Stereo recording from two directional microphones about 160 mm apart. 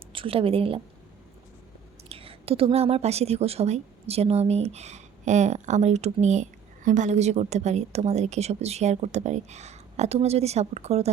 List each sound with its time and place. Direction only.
0.1 s a woman's voice: 35° right (ahead or behind)
2.0 s a woman's voice: 35° right (ahead or behind)